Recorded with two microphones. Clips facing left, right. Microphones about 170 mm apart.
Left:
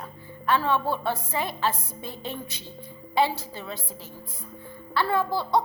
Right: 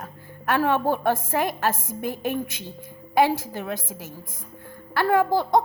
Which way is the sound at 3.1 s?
45° right (ahead or behind).